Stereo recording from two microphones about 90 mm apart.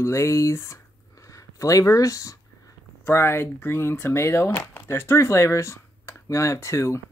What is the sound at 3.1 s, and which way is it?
Speech, 25° left (ahead or behind).